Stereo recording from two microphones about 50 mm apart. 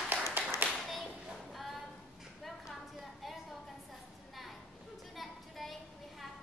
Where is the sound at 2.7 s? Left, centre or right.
Centre.